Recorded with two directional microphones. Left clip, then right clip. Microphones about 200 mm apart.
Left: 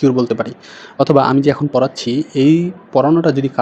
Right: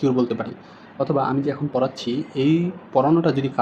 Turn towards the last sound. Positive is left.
turn(degrees=20)  # may be behind; listen again after turning